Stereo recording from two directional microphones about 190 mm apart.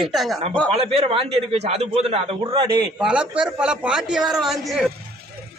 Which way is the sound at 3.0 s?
5° right (ahead or behind).